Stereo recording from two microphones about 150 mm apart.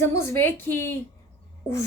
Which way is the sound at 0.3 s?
15° left (ahead or behind).